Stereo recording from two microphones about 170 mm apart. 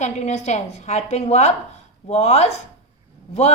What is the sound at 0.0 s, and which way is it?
A woman's voice, 45° left (ahead or behind).